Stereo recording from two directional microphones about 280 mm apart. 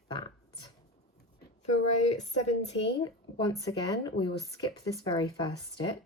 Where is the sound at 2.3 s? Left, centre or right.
Left.